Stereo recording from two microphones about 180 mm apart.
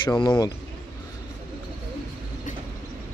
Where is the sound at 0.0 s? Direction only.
25° left (ahead or behind).